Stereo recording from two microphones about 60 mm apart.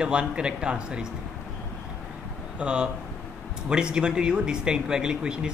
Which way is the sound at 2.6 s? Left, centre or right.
Centre.